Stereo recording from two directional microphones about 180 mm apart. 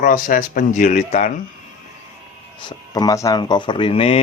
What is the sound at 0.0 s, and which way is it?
Speech, 50° left (ahead or behind).